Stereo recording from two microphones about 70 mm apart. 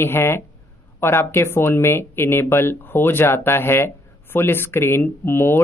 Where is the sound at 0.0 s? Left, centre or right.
Left.